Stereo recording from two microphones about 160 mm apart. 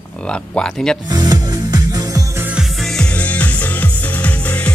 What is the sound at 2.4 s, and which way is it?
Music, 5° right (ahead or behind).